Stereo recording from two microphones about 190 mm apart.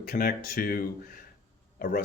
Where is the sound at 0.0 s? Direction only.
50° left (ahead or behind).